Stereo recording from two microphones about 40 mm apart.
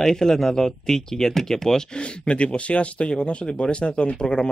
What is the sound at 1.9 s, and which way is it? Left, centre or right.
Speech, left.